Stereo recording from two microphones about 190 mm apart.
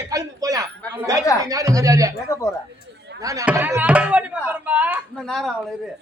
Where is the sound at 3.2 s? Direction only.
15° right (ahead or behind).